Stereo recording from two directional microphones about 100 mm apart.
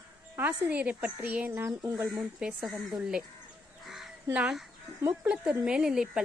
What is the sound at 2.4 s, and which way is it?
Speech, 5° right (ahead or behind).